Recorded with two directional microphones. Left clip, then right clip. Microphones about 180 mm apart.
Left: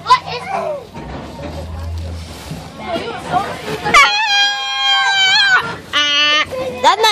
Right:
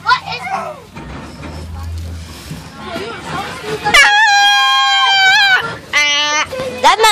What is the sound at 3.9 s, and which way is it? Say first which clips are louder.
Dog: right 2 dB; 25° right (ahead or behind).